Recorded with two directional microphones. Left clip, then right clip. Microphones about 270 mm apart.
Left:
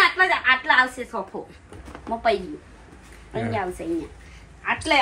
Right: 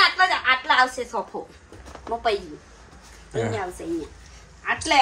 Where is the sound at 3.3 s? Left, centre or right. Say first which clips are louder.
Right 1 dB; centre.